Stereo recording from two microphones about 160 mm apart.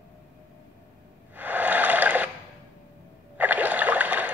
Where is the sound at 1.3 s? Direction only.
10° right (ahead or behind).